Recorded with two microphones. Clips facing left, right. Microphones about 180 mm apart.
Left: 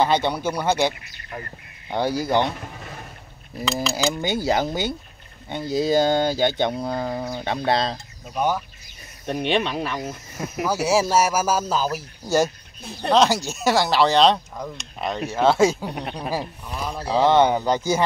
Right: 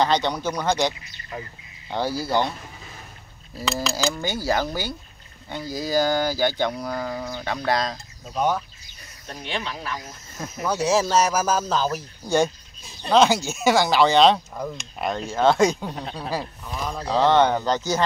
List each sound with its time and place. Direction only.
0.0 s speech: 10° left (ahead or behind)
3.9 s a sound: 15° left (ahead or behind)
8.4 s speech: 10° left (ahead or behind)
9.2 s speech: 65° left (ahead or behind)
10.6 s speech: 10° left (ahead or behind)
12.8 s speech: 60° left (ahead or behind)
13.1 s speech: centre (ahead or behind)